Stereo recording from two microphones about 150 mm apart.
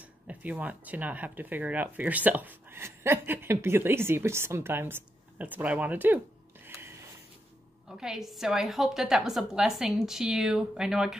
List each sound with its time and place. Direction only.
0.3 s speech: 10° right (ahead or behind)
7.9 s a woman's voice: 5° right (ahead or behind)